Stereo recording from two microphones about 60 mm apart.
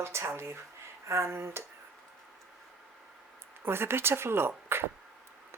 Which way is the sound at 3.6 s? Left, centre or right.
Right.